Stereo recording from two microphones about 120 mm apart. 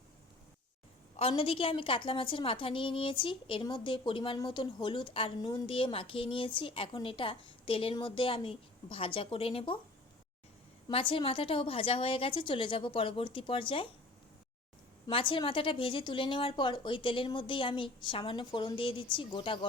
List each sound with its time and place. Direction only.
1.1 s a woman's voice: 55° left (ahead or behind)
10.9 s a woman's voice: 50° left (ahead or behind)
15.1 s a woman's voice: 45° left (ahead or behind)